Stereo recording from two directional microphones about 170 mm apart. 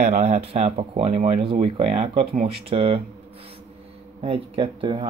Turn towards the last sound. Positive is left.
turn(degrees=-30)  # may be behind; listen again after turning